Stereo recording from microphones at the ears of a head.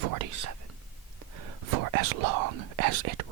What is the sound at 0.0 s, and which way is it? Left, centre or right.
Whispering, right.